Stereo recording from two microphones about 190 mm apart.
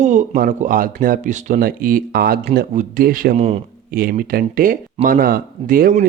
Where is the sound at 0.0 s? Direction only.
40° right (ahead or behind).